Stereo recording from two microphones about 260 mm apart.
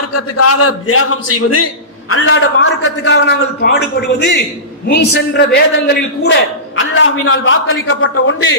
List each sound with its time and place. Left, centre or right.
0.1 s a man's voice: left
4.9 s a man's voice: left